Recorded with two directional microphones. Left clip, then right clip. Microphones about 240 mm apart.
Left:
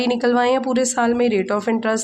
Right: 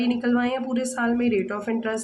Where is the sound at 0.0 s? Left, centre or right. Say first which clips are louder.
Left 7 dB; left.